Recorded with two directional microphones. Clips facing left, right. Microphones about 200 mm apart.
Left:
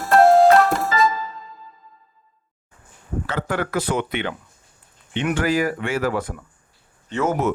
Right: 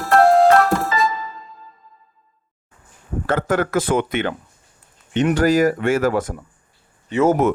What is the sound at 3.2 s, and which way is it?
Speech, 50° right (ahead or behind).